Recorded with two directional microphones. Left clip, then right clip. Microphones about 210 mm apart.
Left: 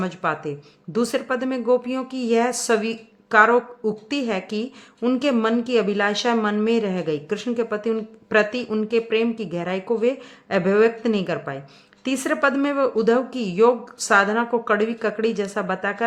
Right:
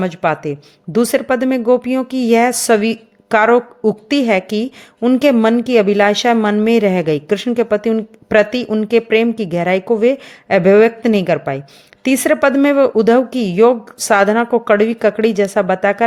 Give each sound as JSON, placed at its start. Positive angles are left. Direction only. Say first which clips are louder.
{"t": 0.0, "sound": "speech", "louder": "right 8 dB", "side_deg": -30}